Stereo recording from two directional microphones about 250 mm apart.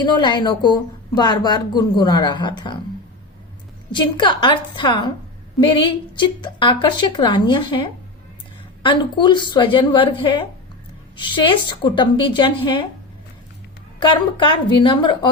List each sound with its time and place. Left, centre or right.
0.0 s a woman's voice: centre
3.9 s a woman's voice: centre
14.0 s a woman's voice: centre